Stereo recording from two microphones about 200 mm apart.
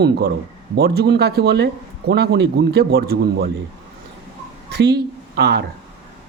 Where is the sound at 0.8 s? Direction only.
55° right (ahead or behind).